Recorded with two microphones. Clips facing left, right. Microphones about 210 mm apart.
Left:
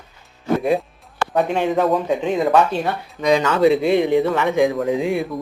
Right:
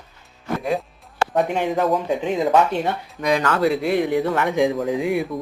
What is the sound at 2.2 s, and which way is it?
Speech, 15° right (ahead or behind).